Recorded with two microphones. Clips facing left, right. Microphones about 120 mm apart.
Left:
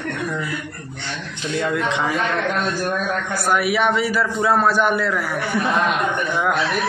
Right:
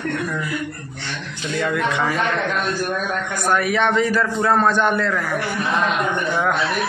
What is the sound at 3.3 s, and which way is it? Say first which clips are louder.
A man's voice: even; 10° left (ahead or behind).